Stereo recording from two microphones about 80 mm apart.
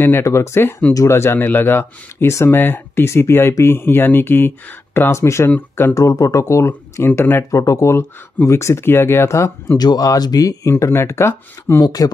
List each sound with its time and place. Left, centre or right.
0.0 s speech: left
5.5 s speech: left
5.9 s speech: left
6.7 s speech: left
7.5 s speech: left
9.8 s speech: left
10.7 s speech: left
11.8 s speech: left